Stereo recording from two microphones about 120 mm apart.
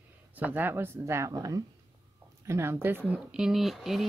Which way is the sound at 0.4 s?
15° right (ahead or behind).